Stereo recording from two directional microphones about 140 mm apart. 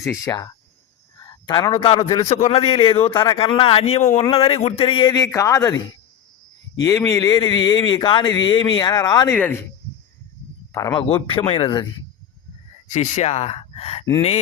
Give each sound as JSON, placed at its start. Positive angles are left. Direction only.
{"t": 0.0, "sound": "a man's voice", "side_deg": 25}
{"t": 9.3, "sound": "speech", "side_deg": 10}
{"t": 10.7, "sound": "speech", "side_deg": 25}
{"t": 11.1, "sound": "a man's voice", "side_deg": 40}
{"t": 12.9, "sound": "speech", "side_deg": 55}